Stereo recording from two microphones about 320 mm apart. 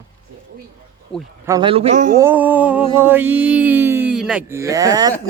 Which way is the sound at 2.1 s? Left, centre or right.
Centre.